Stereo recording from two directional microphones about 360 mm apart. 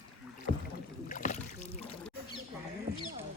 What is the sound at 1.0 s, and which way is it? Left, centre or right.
Rowboat, left.